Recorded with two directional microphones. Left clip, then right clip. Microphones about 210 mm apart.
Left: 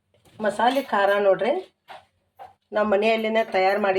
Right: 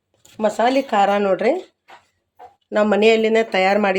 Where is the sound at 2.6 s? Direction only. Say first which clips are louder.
Right 5 dB; 50° right (ahead or behind).